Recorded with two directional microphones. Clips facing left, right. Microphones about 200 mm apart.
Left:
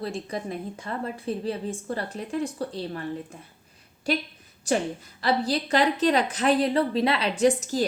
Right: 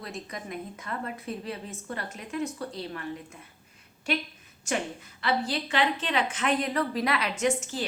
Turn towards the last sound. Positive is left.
turn(degrees=40)  # may be behind; listen again after turning